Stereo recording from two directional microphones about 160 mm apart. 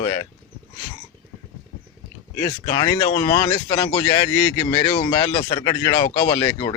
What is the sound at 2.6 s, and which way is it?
Speech, 25° left (ahead or behind).